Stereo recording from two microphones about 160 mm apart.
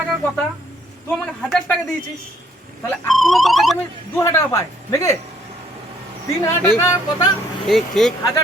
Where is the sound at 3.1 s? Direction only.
Centre (ahead or behind).